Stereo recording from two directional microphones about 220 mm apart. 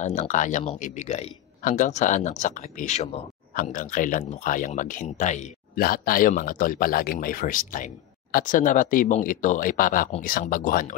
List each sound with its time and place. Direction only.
0.0 s a man's voice: 30° left (ahead or behind)